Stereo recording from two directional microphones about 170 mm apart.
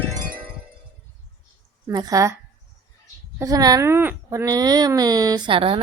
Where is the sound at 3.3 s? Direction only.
20° right (ahead or behind).